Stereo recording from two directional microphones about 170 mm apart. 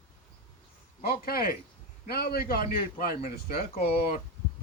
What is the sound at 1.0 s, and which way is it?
A man's voice, 65° left (ahead or behind).